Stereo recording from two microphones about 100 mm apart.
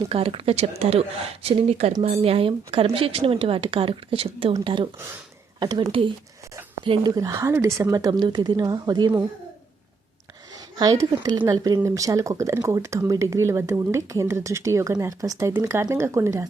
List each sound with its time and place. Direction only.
0.1 s a woman's voice: 70° right (ahead or behind)
5.5 s speech: 45° right (ahead or behind)
7.0 s a woman's voice: 35° right (ahead or behind)
10.8 s speech: 45° right (ahead or behind)
11.8 s a woman's voice: 30° right (ahead or behind)